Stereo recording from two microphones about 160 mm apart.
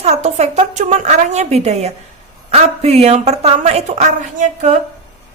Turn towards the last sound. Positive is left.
turn(degrees=-50)  # may be behind; listen again after turning